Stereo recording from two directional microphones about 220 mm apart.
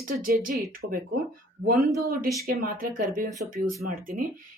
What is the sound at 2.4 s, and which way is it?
Speech, 40° right (ahead or behind).